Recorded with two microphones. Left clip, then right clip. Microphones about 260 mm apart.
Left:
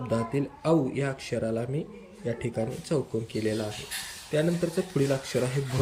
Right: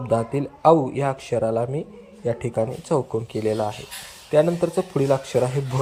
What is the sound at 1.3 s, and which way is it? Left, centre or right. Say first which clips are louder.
Speech: right 8 dB; right.